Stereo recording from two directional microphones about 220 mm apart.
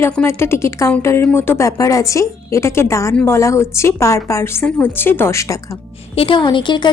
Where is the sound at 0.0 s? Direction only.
10° left (ahead or behind).